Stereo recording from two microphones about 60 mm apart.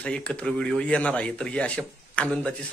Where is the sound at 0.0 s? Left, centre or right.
Centre.